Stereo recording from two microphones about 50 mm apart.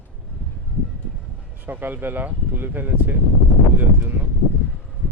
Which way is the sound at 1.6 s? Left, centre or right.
Right.